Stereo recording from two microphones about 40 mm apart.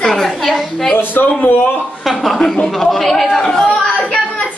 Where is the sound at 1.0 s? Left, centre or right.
Left.